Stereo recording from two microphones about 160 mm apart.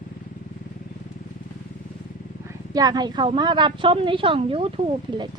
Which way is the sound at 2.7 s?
25° right (ahead or behind).